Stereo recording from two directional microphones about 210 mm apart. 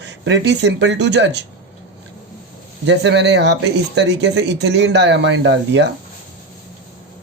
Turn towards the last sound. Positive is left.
turn(degrees=-55)  # may be behind; listen again after turning